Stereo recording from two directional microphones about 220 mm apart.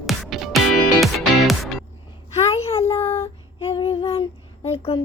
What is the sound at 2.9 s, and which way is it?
Child singing, 10° left (ahead or behind).